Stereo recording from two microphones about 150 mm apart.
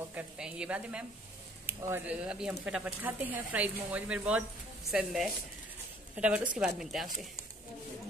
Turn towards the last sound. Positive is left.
turn(degrees=0)  # may be behind; listen again after turning